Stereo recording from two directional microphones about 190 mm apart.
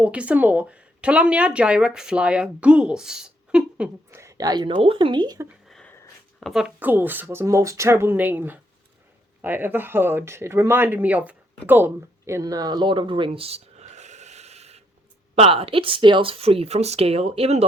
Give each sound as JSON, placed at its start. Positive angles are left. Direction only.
{"t": 0.0, "sound": "speech", "side_deg": -5}
{"t": 5.6, "sound": "a sound", "side_deg": 5}
{"t": 6.4, "sound": "speech", "side_deg": 0}